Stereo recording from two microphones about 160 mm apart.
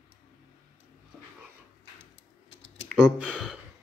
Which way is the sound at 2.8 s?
5° right (ahead or behind).